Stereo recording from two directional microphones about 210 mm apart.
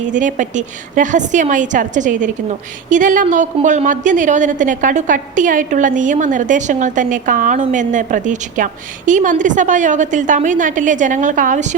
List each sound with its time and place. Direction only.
0.1 s a woman's voice: 35° right (ahead or behind)